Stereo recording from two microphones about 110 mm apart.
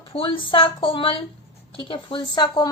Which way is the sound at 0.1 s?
55° left (ahead or behind).